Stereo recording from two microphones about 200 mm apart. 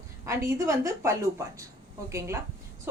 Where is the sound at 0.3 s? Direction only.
15° right (ahead or behind).